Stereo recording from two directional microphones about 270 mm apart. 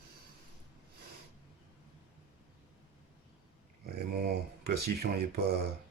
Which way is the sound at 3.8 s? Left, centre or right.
Right.